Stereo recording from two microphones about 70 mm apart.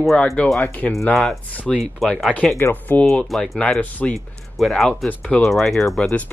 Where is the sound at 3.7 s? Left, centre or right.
Centre.